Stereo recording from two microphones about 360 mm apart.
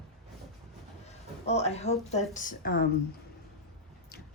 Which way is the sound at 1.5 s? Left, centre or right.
Centre.